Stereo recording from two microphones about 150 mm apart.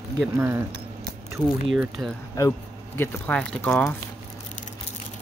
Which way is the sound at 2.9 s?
10° left (ahead or behind).